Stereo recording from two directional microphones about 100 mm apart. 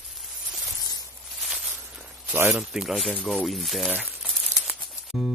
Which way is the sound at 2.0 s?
20° right (ahead or behind).